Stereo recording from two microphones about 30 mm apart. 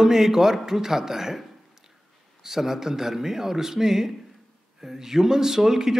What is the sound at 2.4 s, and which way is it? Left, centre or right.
Speech, centre.